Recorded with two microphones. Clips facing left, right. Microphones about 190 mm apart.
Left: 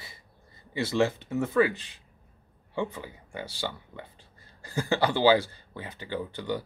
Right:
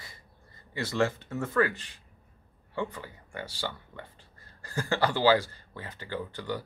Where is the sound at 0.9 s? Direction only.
15° left (ahead or behind).